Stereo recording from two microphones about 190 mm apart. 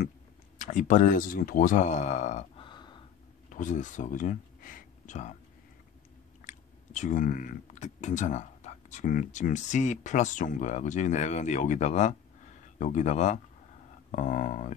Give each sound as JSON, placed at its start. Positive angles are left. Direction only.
{"t": 0.6, "sound": "speech", "side_deg": 40}
{"t": 3.4, "sound": "speech", "side_deg": 45}
{"t": 6.4, "sound": "speech", "side_deg": 40}